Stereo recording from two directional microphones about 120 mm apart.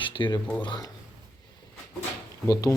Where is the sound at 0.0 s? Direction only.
40° left (ahead or behind).